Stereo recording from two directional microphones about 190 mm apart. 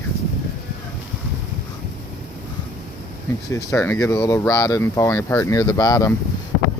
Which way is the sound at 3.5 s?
15° left (ahead or behind).